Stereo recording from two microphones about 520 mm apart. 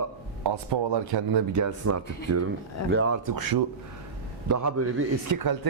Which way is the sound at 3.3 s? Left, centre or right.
Right.